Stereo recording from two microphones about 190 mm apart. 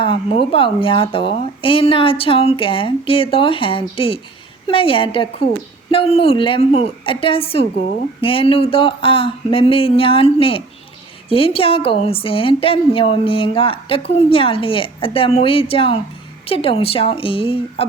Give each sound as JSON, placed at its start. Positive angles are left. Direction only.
{"t": 0.0, "sound": "a woman's voice", "side_deg": 30}